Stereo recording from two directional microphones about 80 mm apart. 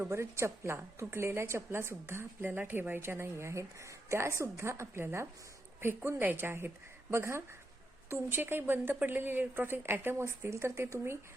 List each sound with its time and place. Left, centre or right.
0.0 s a woman's voice: right